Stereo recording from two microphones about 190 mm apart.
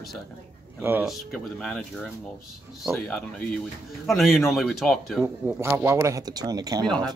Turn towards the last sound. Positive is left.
turn(degrees=-20)  # may be behind; listen again after turning